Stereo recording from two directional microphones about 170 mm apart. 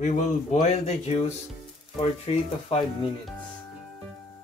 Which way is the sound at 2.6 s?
35° left (ahead or behind).